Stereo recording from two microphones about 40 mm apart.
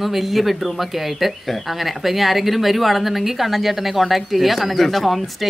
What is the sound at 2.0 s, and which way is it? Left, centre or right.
Speech, centre.